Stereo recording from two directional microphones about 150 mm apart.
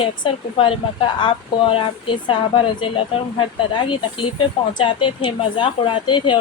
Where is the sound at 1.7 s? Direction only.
35° left (ahead or behind).